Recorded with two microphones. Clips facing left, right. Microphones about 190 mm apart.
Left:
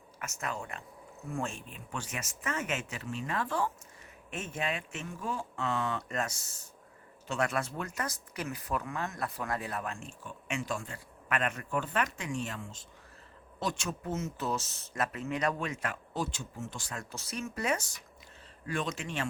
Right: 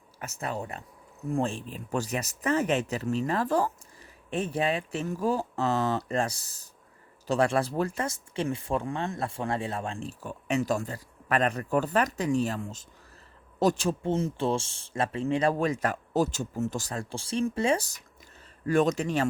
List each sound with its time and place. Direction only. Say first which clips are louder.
0.2 s speech: right 5 dB; 35° right (ahead or behind)